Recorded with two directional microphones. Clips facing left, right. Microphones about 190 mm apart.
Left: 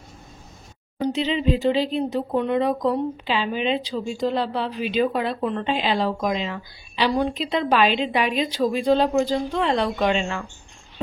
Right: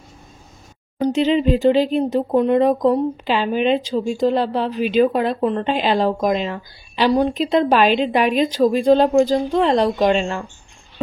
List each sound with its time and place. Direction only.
1.0 s speech: 50° right (ahead or behind)